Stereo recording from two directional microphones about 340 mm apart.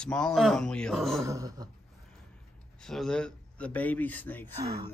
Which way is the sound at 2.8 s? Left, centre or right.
Centre.